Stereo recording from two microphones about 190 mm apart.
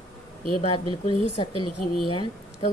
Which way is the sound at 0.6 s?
30° left (ahead or behind).